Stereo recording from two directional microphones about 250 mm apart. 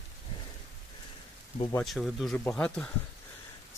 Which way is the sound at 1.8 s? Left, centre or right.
Centre.